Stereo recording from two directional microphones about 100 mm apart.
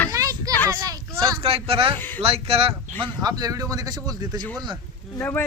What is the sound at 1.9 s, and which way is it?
Speech, 20° left (ahead or behind).